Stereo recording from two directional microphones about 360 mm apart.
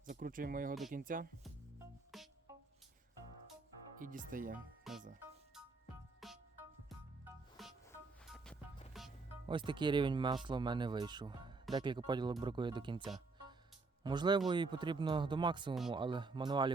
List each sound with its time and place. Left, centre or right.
0.0 s speech: right
2.1 s music: centre
3.9 s speech: right
4.5 s speech: centre
6.1 s music: centre
8.9 s music: centre
9.5 s speech: centre
13.0 s speech: centre
14.0 s speech: centre